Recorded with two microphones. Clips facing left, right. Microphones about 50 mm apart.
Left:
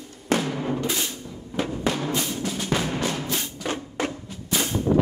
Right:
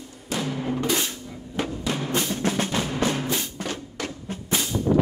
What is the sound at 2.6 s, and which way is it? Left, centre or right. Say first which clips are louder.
Music: left 1 dB; left.